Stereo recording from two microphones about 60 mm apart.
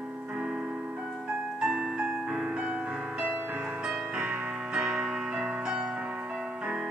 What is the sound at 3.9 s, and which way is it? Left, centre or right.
Music, centre.